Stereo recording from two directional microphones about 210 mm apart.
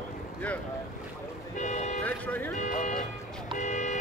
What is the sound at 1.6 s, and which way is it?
Music, 35° left (ahead or behind).